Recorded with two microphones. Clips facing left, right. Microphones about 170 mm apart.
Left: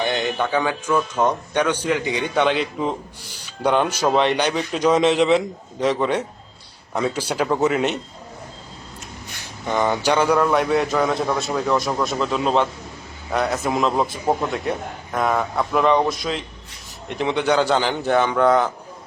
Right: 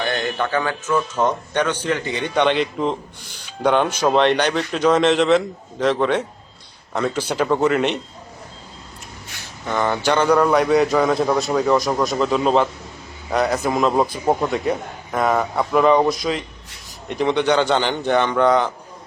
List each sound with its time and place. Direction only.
0.0 s a sound: 20° left (ahead or behind)
0.5 s speech: 15° left (ahead or behind)
9.4 s a man's voice: 15° left (ahead or behind)